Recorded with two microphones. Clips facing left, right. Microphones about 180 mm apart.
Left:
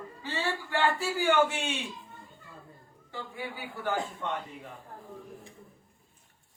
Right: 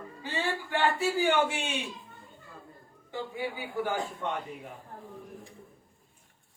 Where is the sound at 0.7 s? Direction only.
20° right (ahead or behind).